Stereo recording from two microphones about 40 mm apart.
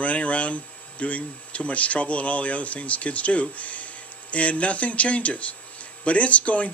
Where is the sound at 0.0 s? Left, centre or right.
Left.